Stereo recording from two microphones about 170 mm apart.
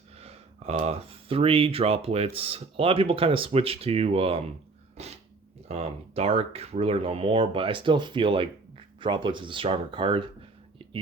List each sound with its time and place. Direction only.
0.2 s speech: 40° right (ahead or behind)
5.0 s dog: 40° right (ahead or behind)
5.6 s speech: 40° right (ahead or behind)